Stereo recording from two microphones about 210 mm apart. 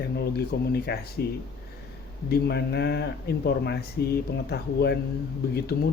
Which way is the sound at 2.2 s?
50° left (ahead or behind).